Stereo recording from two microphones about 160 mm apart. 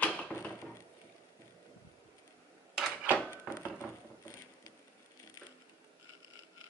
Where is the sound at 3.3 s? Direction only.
15° left (ahead or behind).